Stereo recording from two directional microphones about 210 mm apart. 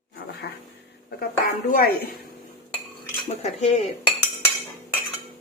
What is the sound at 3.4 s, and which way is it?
Cutlery, 30° left (ahead or behind).